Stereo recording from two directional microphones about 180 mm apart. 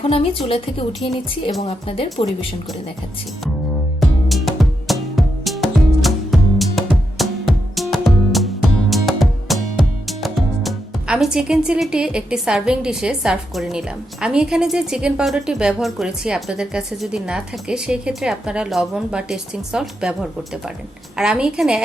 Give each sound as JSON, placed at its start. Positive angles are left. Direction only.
{"t": 0.0, "sound": "a woman's voice", "side_deg": 30}
{"t": 4.0, "sound": "music", "side_deg": 0}
{"t": 10.1, "sound": "speech", "side_deg": 0}